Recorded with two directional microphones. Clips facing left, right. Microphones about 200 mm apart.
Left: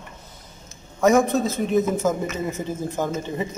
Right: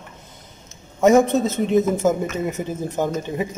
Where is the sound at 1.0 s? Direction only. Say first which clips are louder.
Right 3 dB; 25° right (ahead or behind).